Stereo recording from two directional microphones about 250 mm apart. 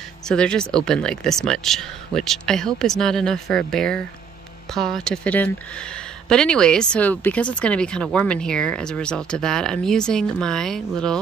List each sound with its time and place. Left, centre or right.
0.3 s speech: centre